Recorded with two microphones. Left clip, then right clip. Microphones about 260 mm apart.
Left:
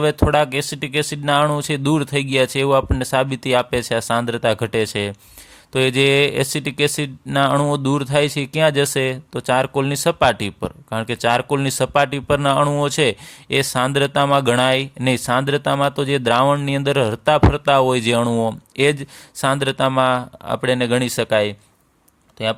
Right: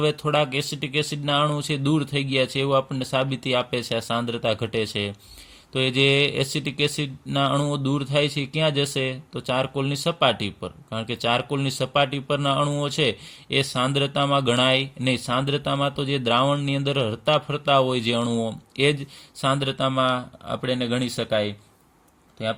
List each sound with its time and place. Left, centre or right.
0.3 s speech: left